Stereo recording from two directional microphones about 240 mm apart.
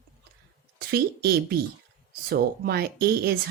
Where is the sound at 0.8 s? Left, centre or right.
Right.